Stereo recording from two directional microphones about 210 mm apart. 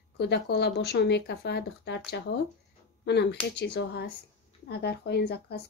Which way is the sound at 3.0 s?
55° left (ahead or behind).